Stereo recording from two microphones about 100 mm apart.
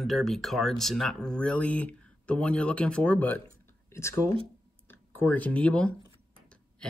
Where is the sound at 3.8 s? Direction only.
30° left (ahead or behind).